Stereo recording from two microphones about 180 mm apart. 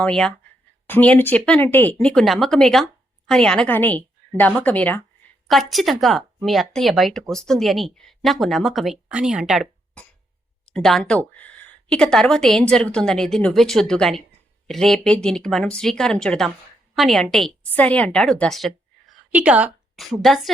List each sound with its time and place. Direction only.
0.0 s a woman's voice: 5° left (ahead or behind)